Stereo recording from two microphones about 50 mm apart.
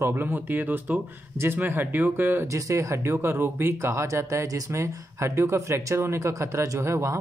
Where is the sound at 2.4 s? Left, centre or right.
Right.